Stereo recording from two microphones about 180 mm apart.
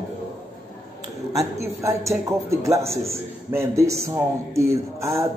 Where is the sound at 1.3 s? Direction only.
15° right (ahead or behind).